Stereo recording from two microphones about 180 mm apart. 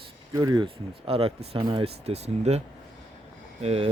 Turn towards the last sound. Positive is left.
turn(degrees=-35)  # may be behind; listen again after turning